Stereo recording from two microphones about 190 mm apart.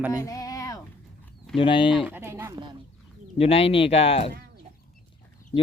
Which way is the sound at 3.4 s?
30° left (ahead or behind).